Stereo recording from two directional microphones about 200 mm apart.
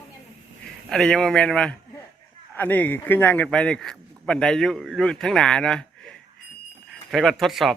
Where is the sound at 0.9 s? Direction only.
5° left (ahead or behind).